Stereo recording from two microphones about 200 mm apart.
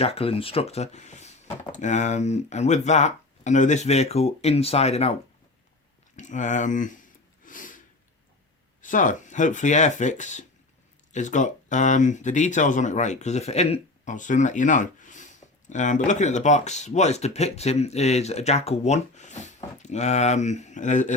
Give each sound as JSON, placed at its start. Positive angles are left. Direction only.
{"t": 0.0, "sound": "speech", "side_deg": 30}
{"t": 6.1, "sound": "speech", "side_deg": 35}
{"t": 7.4, "sound": "a sound", "side_deg": 40}
{"t": 8.8, "sound": "speech", "side_deg": 40}